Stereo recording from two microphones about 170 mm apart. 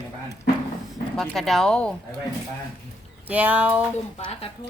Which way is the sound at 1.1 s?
Centre (ahead or behind).